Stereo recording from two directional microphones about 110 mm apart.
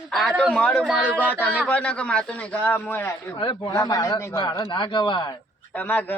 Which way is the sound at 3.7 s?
30° left (ahead or behind).